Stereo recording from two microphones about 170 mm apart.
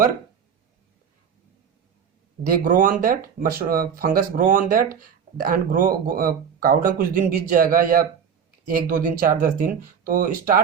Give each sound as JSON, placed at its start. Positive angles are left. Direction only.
{"t": 2.4, "sound": "speech", "side_deg": -55}